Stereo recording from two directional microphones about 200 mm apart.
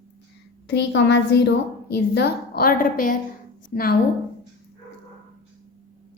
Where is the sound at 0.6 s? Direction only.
60° left (ahead or behind); by 3.9 s 45° left (ahead or behind).